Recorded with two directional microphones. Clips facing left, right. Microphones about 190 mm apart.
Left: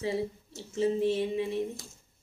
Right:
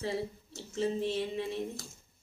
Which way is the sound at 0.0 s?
15° left (ahead or behind).